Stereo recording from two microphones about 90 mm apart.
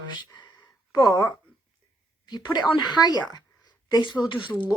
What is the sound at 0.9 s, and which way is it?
Speech, 35° left (ahead or behind).